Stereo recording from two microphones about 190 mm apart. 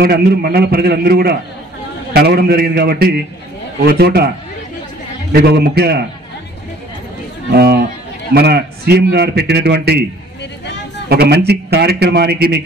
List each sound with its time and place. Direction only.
0.0 s a man's voice: 55° right (ahead or behind)
5.3 s a man's voice: 60° right (ahead or behind)
7.5 s a man's voice: 55° right (ahead or behind)
11.1 s a man's voice: 60° right (ahead or behind)